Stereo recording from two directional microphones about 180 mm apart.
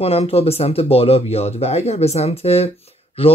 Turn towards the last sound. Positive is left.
turn(degrees=30)  # may be behind; listen again after turning